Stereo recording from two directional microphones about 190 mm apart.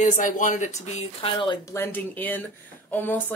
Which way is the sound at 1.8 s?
10° left (ahead or behind).